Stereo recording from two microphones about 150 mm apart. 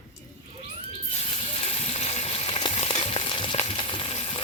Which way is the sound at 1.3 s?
40° left (ahead or behind).